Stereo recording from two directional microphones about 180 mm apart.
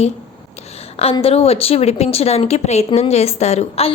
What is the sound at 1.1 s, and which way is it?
Speech, 35° left (ahead or behind).